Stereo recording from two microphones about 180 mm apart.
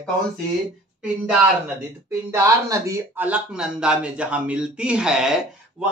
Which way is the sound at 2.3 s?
15° right (ahead or behind).